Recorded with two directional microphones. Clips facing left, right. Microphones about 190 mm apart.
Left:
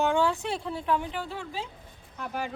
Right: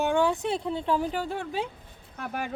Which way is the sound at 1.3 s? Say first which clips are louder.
Right 5 dB; 60° right (ahead or behind).